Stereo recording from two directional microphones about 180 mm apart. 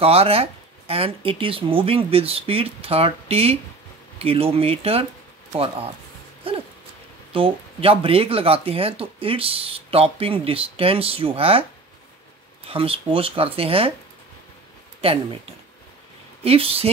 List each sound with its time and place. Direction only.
0.0 s speech: 35° right (ahead or behind)
7.3 s speech: 30° right (ahead or behind)
12.6 s speech: 30° right (ahead or behind)
16.4 s speech: 35° right (ahead or behind)